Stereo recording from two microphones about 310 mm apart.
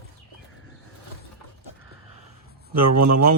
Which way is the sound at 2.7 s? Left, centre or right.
Right.